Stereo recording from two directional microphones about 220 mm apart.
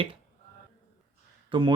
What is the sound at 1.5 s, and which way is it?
Speech, 20° right (ahead or behind).